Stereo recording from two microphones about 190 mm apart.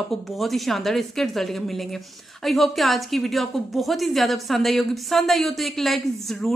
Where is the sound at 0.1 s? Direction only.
Centre (ahead or behind).